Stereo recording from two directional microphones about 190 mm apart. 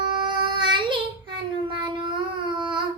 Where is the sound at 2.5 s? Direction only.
25° right (ahead or behind).